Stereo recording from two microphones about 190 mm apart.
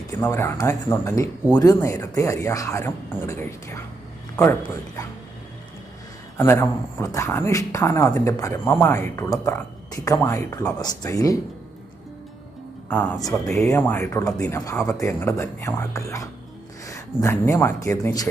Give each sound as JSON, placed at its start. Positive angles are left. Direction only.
{"t": 0.1, "sound": "speech", "side_deg": 15}
{"t": 6.3, "sound": "speech", "side_deg": 10}
{"t": 12.9, "sound": "speech", "side_deg": 10}